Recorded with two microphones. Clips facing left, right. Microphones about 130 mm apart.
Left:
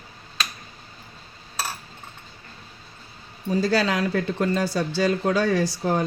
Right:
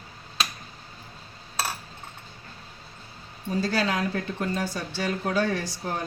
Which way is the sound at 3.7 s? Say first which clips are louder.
Left 3 dB; 90° left.